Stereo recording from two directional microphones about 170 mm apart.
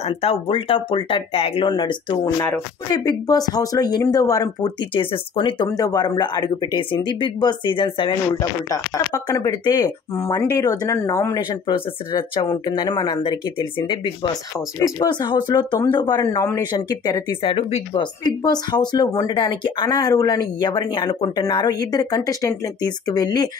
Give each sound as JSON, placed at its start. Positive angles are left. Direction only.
{"t": 0.0, "sound": "speech", "side_deg": 35}
{"t": 2.2, "sound": "speech", "side_deg": 10}
{"t": 2.9, "sound": "speech", "side_deg": 25}
{"t": 18.2, "sound": "speech", "side_deg": 25}